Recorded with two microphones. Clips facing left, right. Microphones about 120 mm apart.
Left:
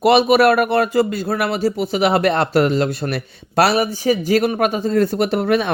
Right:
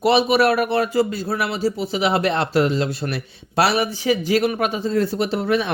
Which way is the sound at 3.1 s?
45° left (ahead or behind).